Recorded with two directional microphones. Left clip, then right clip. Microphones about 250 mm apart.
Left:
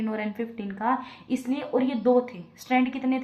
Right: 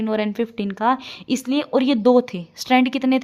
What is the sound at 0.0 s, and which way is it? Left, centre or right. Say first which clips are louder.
Speech: right 8 dB; right.